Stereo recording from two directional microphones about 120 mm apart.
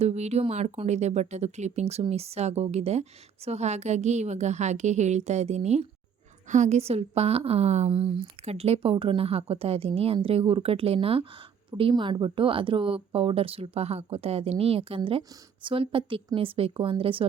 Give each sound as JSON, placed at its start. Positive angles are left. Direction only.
{"t": 0.0, "sound": "a woman's voice", "side_deg": -65}